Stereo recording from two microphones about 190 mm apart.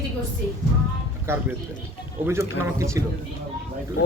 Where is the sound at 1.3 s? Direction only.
15° right (ahead or behind).